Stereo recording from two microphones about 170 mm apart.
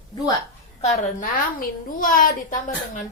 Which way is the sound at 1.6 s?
55° left (ahead or behind).